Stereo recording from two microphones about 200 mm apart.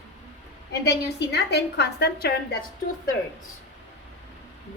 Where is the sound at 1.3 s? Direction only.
55° left (ahead or behind).